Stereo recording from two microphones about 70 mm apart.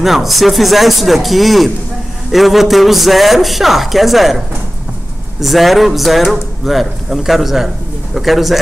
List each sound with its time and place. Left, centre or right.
0.0 s speech: centre
5.4 s speech: centre